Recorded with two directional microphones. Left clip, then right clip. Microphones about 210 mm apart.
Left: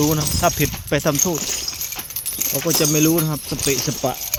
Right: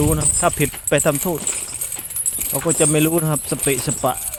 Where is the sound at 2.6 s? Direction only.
20° right (ahead or behind).